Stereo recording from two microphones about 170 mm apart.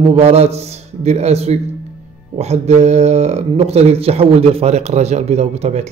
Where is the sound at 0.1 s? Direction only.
35° right (ahead or behind).